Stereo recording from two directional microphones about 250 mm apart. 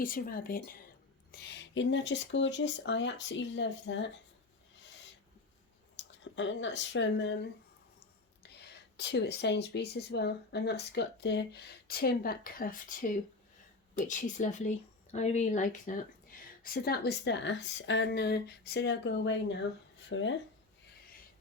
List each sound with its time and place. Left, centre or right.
0.0 s speech: left
6.0 s speech: left
9.0 s speech: left